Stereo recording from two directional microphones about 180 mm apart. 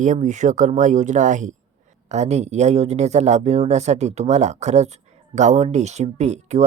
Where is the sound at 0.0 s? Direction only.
45° right (ahead or behind).